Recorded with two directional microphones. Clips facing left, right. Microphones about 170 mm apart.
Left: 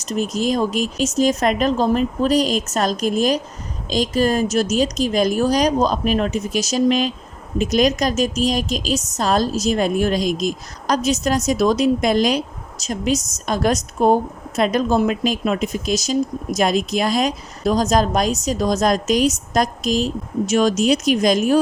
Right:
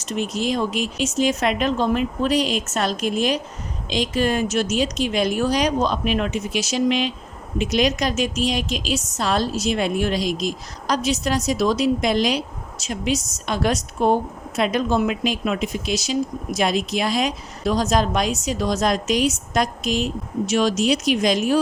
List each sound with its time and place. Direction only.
0.0 s a woman's voice: 40° left (ahead or behind)